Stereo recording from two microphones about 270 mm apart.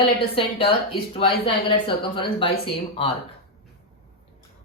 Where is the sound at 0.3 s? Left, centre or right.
Centre.